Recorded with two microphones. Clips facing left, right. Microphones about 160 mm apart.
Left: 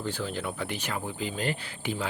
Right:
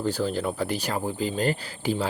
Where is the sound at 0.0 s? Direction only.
40° right (ahead or behind).